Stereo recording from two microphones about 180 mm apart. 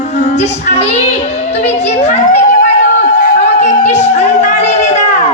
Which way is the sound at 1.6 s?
40° left (ahead or behind).